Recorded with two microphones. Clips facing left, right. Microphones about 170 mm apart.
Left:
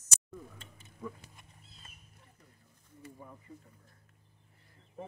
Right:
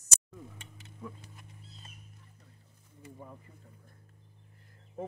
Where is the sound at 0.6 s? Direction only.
75° right (ahead or behind).